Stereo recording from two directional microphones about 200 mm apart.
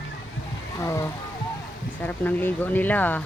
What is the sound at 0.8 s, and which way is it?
Speech, 15° left (ahead or behind).